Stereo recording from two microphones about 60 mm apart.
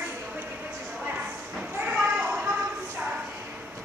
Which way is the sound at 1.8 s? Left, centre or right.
Centre.